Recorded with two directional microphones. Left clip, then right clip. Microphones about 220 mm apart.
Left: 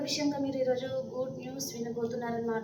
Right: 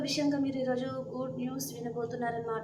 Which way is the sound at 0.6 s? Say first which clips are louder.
Left 6 dB; 25° right (ahead or behind).